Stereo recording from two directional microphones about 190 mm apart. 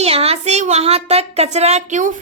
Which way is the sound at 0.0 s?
30° right (ahead or behind).